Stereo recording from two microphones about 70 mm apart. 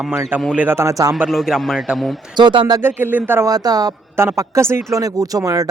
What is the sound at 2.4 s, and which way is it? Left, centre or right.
Speech, right.